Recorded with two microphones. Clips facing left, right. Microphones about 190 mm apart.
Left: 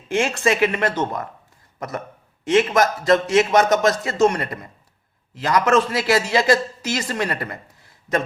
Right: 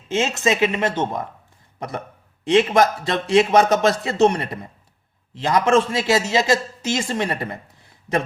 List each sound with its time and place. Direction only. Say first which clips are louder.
0.1 s a man's voice: left 1 dB; 20° right (ahead or behind)